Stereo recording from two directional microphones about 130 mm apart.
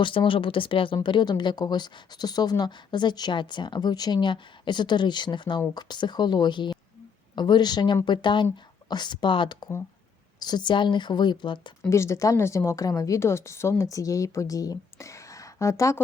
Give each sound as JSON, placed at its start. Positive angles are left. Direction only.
{"t": 0.0, "sound": "speech", "side_deg": 40}
{"t": 11.9, "sound": "a woman's voice", "side_deg": 20}